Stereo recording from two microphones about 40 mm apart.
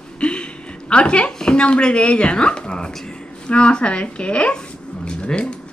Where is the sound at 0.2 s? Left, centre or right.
Left.